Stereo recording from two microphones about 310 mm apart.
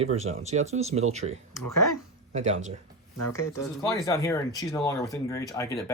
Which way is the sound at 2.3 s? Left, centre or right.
Right.